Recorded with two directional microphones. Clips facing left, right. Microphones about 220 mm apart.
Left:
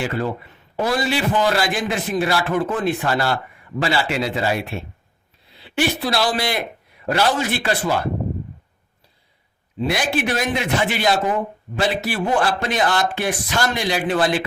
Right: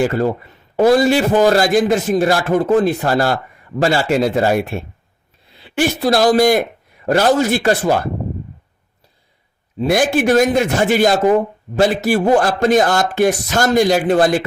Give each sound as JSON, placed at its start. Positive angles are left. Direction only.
{"t": 0.0, "sound": "a man's voice", "side_deg": -45}
{"t": 9.7, "sound": "a man's voice", "side_deg": -45}